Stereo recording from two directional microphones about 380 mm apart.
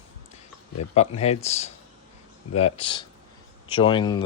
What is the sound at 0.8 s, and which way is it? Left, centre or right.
Speech, centre.